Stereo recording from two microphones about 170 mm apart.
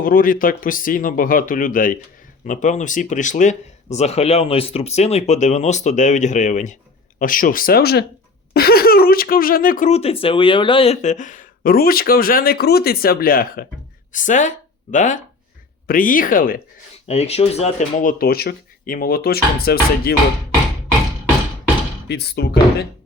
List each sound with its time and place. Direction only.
0.0 s speech: 55° left (ahead or behind)
9.9 s speech: 35° left (ahead or behind); by 13.7 s 60° left (ahead or behind)
14.1 s speech: 50° left (ahead or behind)
17.1 s speech: 40° left (ahead or behind)
18.0 s speech: 60° left (ahead or behind)
22.0 s speech: 70° left (ahead or behind)